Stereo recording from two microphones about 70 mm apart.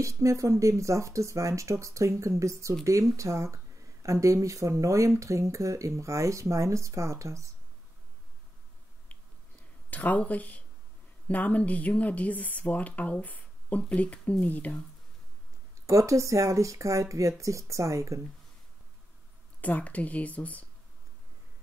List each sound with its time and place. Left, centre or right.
0.0 s speech: right
9.8 s speech: left
15.9 s speech: right
19.6 s speech: left